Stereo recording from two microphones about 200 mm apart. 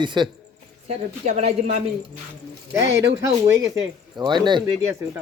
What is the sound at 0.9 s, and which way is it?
Speech, 35° right (ahead or behind).